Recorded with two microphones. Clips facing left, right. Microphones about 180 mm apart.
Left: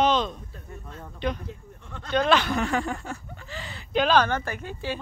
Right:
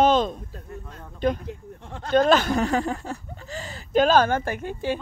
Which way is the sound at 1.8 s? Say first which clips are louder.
Right 5 dB; 45° right (ahead or behind).